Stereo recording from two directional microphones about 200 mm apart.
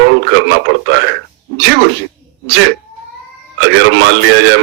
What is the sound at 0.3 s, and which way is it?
Speech, 65° right (ahead or behind).